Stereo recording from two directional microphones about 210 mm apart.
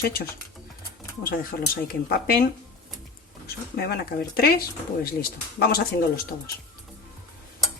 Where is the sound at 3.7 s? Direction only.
50° left (ahead or behind).